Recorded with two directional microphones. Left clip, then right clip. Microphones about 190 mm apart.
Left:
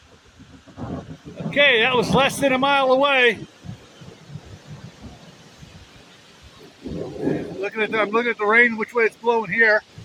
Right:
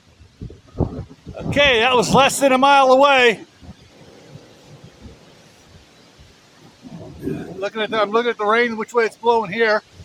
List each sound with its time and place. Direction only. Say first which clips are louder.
1.5 s speech: right 2 dB; 35° right (ahead or behind)
7.6 s speech: right 3 dB; 20° right (ahead or behind)